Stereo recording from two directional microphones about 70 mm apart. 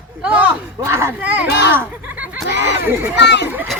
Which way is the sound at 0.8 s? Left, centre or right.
Right.